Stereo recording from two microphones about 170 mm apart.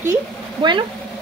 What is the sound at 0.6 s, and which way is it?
Speech, 30° right (ahead or behind).